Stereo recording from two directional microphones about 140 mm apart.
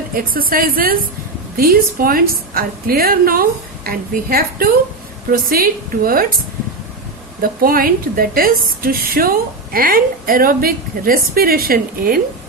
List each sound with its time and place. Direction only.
0.2 s a woman's voice: 90° right
7.4 s a woman's voice: 90° right